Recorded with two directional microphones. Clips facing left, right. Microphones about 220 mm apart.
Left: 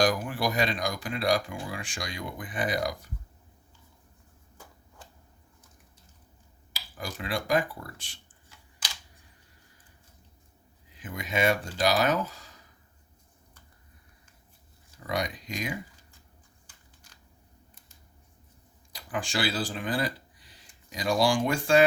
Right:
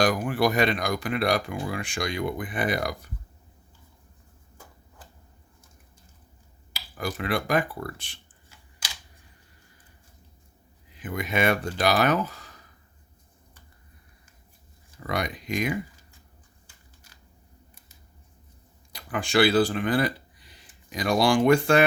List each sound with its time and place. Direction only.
0.0 s speech: 60° right (ahead or behind)
6.7 s speech: 60° right (ahead or behind)
10.9 s speech: 60° right (ahead or behind)
15.0 s speech: 60° right (ahead or behind)
18.9 s speech: 60° right (ahead or behind)